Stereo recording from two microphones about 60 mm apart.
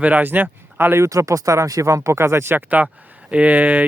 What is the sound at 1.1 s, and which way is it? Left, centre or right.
Speech, right.